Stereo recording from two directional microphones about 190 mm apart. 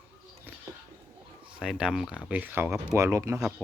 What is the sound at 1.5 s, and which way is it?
Speech, 5° right (ahead or behind).